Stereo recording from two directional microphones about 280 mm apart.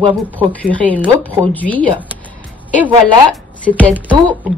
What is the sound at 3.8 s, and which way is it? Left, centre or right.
Speech, centre.